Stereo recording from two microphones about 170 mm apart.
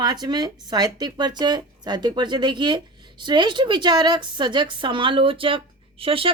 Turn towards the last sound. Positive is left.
turn(degrees=-30)  # may be behind; listen again after turning